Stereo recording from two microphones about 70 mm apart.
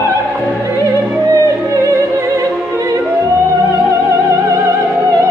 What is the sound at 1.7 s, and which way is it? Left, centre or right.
Opera, right.